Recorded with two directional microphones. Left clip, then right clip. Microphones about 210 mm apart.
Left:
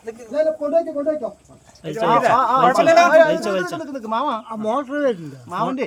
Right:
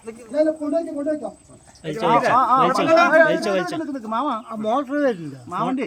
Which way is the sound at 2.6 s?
10° left (ahead or behind).